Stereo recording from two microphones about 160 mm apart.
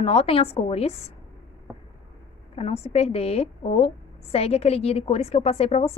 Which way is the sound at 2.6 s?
40° left (ahead or behind).